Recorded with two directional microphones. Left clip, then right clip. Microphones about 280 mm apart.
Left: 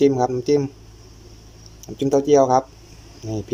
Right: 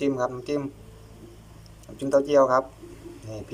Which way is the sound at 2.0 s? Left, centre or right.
Centre.